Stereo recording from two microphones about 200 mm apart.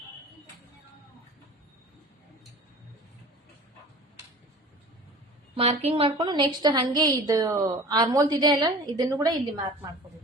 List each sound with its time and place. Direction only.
5.5 s a woman's voice: 30° right (ahead or behind)